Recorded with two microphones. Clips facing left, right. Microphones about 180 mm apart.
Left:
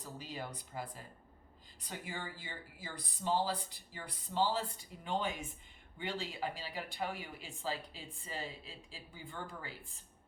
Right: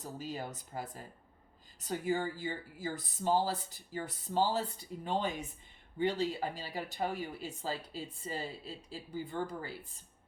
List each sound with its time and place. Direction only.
0.0 s speech: 45° right (ahead or behind)